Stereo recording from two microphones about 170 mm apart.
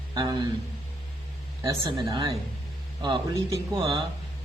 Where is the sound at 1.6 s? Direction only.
20° right (ahead or behind).